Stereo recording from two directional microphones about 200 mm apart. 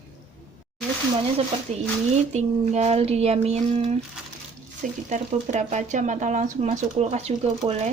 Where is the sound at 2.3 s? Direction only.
35° right (ahead or behind).